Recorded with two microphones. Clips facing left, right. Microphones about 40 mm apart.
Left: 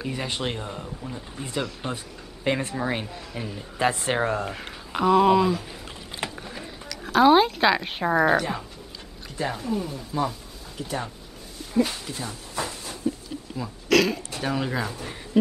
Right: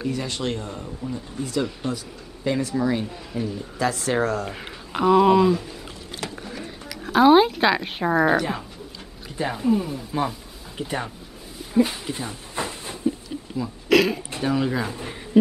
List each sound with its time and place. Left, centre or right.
0.1 s speech: left
1.8 s speech: left
2.4 s speech: left
4.5 s speech: centre
5.7 s a sound: left
6.3 s a sound: centre
7.1 s speech: centre
9.4 s speech: centre
10.8 s speech: right
11.7 s a sound: centre
14.4 s speech: centre
14.9 s speech: centre